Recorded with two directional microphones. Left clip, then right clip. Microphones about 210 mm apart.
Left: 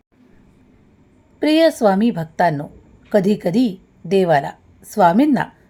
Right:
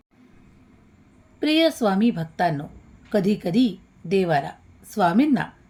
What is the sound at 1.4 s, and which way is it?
A woman's voice, 20° left (ahead or behind).